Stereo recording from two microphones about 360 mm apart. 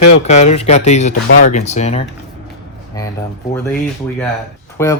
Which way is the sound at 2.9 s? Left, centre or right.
Centre.